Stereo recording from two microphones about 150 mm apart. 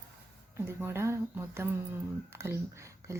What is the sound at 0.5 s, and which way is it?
Speech, 15° right (ahead or behind).